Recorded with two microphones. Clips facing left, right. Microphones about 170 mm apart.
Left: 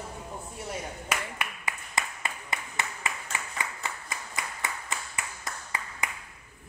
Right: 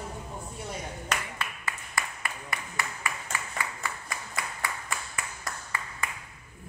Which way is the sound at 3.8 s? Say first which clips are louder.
Even; 20° left (ahead or behind).